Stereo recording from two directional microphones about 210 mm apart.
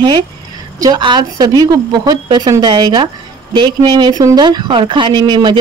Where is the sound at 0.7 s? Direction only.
20° right (ahead or behind).